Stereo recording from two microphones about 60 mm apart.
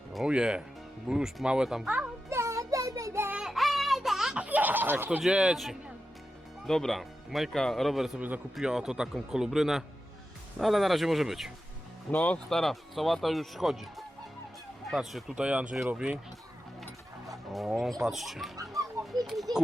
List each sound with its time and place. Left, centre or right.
0.3 s speech: centre
2.3 s a sound: right
3.4 s a sound: centre
4.4 s snicker: right
5.2 s speech: centre
6.7 s speech: centre
12.1 s speech: left
12.5 s speech: centre
15.4 s speech: centre
17.7 s speech: centre
18.5 s children playing: right
19.2 s speech: centre